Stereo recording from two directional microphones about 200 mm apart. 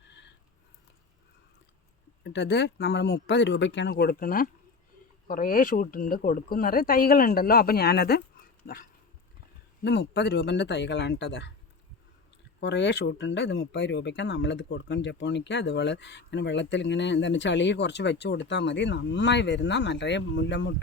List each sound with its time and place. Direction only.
2.2 s speech: 60° left (ahead or behind)
8.6 s dog: 45° left (ahead or behind)
9.8 s speech: 60° left (ahead or behind)
12.5 s speech: 60° left (ahead or behind)